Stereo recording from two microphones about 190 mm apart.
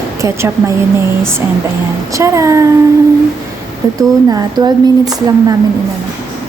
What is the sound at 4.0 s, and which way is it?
Speech, 20° right (ahead or behind).